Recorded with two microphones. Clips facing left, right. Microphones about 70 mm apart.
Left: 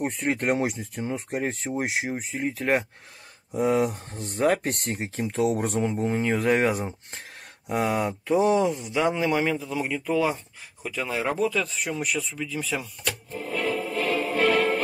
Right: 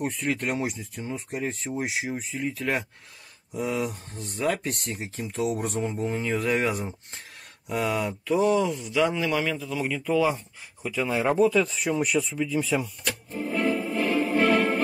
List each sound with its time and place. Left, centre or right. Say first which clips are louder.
0.0 s speech: left 2 dB; left
3.5 s speech: left 6 dB; left
7.7 s speech: left 2 dB; left
8.9 s speech: right 1 dB; left; by 11.3 s centre
11.3 s speech: right 7 dB; right
11.9 s speech: right 4 dB; centre
13.3 s music: right 3 dB; right